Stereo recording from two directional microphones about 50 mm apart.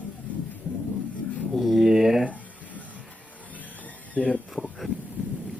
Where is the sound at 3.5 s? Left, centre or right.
Left.